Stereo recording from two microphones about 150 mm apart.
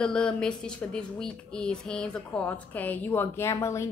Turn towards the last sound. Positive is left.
turn(degrees=20)  # may be behind; listen again after turning